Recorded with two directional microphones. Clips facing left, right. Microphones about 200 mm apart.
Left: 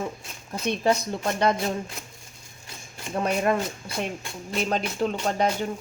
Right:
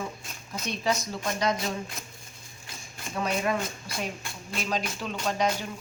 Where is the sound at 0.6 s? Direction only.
60° left (ahead or behind).